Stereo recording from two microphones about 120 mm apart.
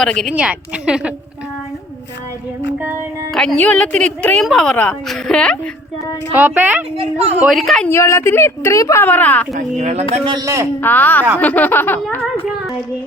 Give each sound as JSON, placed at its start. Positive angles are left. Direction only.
{"t": 0.0, "sound": "a woman's voice", "side_deg": 5}
{"t": 0.3, "sound": "a woman's voice", "side_deg": -10}
{"t": 2.7, "sound": "a woman's voice", "side_deg": -15}
{"t": 3.3, "sound": "a woman's voice", "side_deg": 5}
{"t": 6.3, "sound": "a woman's voice", "side_deg": -15}
{"t": 7.9, "sound": "a woman's voice", "side_deg": 20}
{"t": 9.7, "sound": "speech", "side_deg": -70}
{"t": 10.4, "sound": "a man's voice", "side_deg": -25}
{"t": 10.8, "sound": "a woman's voice", "side_deg": 15}